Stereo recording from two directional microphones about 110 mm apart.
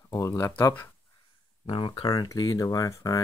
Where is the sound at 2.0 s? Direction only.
40° left (ahead or behind).